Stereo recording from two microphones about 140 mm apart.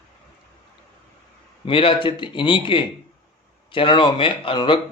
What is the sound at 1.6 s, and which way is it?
A man's voice, 40° left (ahead or behind).